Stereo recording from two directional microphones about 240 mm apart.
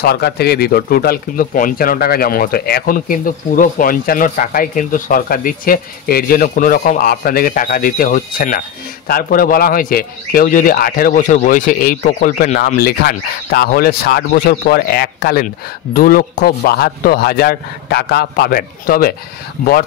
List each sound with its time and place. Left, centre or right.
0.0 s a man's voice: left